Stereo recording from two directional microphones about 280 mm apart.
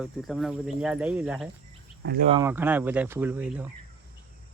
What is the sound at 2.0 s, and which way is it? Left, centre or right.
Speech, right.